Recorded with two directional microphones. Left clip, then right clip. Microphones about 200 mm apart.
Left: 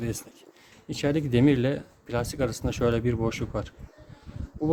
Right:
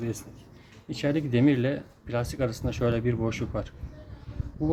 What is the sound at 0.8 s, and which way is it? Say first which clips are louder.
Speech: left 1 dB; 35° left (ahead or behind).